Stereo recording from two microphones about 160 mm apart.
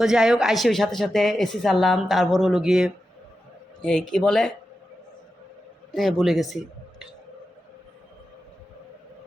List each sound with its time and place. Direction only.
0.0 s speech: 5° right (ahead or behind)
5.9 s speech: centre (ahead or behind)